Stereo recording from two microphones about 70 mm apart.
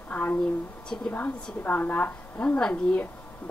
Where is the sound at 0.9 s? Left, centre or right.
Centre.